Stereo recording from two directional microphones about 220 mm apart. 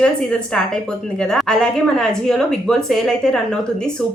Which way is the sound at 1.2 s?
5° left (ahead or behind).